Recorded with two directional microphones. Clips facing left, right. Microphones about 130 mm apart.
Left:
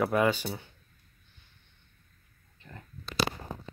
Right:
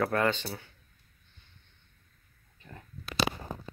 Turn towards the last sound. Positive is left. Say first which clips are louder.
# even
turn(degrees=-10)  # may be behind; listen again after turning